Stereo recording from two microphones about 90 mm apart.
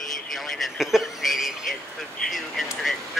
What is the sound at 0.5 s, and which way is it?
Speech, centre (ahead or behind).